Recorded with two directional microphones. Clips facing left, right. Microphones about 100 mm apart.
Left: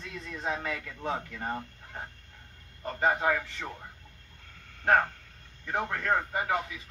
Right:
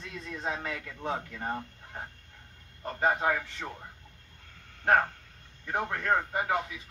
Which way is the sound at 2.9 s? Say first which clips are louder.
Left 1 dB; 15° right (ahead or behind).